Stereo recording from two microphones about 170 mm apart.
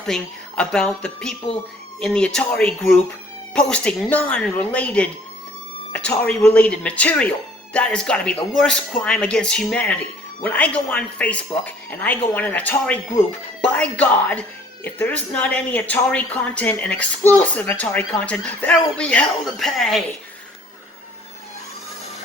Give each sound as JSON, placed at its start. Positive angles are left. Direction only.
{"t": 0.0, "sound": "speech", "side_deg": 5}